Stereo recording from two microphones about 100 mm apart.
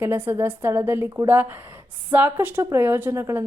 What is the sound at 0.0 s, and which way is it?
A woman's voice, 20° right (ahead or behind).